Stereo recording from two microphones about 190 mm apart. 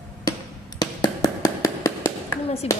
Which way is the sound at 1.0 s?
20° left (ahead or behind).